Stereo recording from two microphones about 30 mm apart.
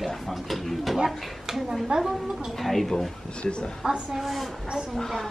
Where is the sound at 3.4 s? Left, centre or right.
Left.